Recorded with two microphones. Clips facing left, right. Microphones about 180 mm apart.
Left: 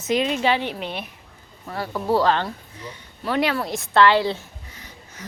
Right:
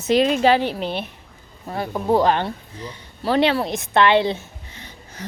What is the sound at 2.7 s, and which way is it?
Speech, 35° right (ahead or behind).